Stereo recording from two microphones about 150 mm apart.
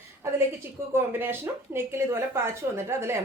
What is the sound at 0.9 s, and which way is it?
A woman's voice, 15° right (ahead or behind).